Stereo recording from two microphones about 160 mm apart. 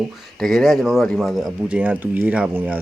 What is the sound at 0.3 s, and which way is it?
Speech, centre (ahead or behind).